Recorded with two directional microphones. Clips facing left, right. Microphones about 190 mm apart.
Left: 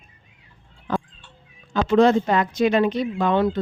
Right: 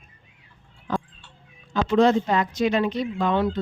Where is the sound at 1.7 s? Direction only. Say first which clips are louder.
Left 2 dB; 55° left (ahead or behind).